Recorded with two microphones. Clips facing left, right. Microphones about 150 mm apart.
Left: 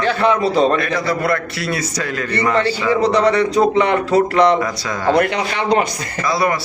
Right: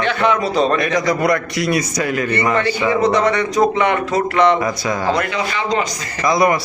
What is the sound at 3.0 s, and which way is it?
Speech, 35° left (ahead or behind).